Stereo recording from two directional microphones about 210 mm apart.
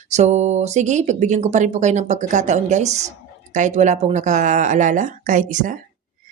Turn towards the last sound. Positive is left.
turn(degrees=-40)  # may be behind; listen again after turning